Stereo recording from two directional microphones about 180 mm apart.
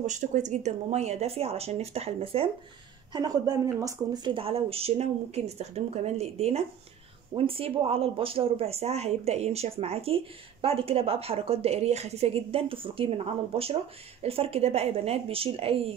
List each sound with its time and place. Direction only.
0.0 s speech: 40° right (ahead or behind)
3.1 s speech: 20° right (ahead or behind)